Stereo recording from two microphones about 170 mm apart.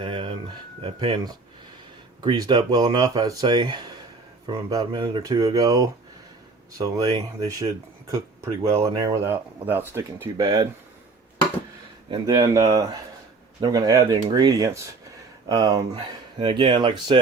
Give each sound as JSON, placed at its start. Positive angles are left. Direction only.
{"t": 0.0, "sound": "speech", "side_deg": -30}
{"t": 12.1, "sound": "speech", "side_deg": -25}